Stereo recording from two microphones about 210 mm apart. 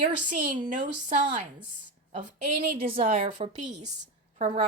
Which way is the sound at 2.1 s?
25° right (ahead or behind).